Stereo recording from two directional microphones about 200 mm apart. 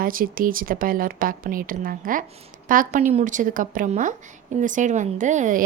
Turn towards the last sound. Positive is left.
turn(degrees=-40)  # may be behind; listen again after turning